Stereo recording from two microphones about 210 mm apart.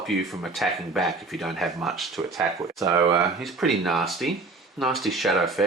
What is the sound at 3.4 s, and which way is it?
Speech, centre (ahead or behind).